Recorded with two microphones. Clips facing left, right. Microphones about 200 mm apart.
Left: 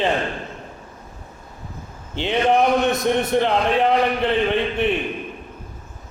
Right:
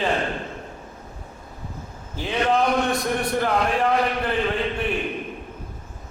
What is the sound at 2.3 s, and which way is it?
A man's voice, 20° left (ahead or behind).